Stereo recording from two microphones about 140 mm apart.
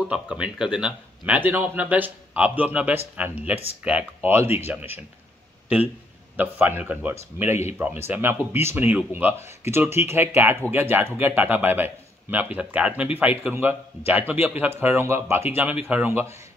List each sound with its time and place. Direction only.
0.1 s speech: 5° right (ahead or behind)
6.3 s speech: 10° right (ahead or behind)